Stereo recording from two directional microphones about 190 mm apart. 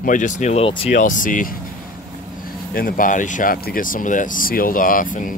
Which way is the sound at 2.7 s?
50° left (ahead or behind).